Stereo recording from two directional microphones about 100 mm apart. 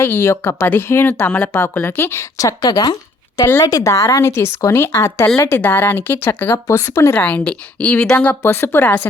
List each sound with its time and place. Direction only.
0.0 s speech: 25° left (ahead or behind)
7.2 s a woman's voice: 15° left (ahead or behind)
8.4 s speech: 25° left (ahead or behind)